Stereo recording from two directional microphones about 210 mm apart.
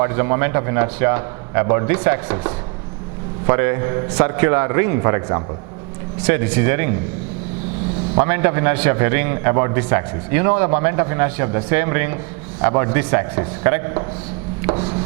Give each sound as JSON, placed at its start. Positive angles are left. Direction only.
{"t": 0.0, "sound": "a man's voice", "side_deg": -15}
{"t": 8.2, "sound": "a man's voice", "side_deg": -10}
{"t": 14.7, "sound": "a sound", "side_deg": -30}